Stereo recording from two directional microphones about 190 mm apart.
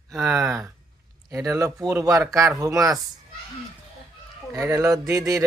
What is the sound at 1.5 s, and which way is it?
Speech, 15° right (ahead or behind).